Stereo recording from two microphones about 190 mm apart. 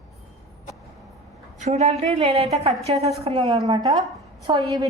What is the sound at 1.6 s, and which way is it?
A woman's voice, 35° right (ahead or behind).